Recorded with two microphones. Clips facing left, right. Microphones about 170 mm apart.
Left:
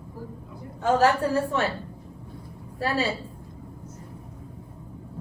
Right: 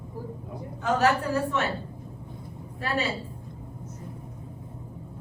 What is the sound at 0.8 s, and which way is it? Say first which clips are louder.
Speech: left 3 dB; 35° left (ahead or behind).